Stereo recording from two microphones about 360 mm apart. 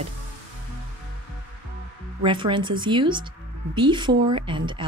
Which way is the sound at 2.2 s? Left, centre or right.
Centre.